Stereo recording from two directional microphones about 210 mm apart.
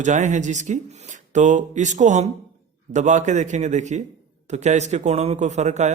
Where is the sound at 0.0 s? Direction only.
35° right (ahead or behind).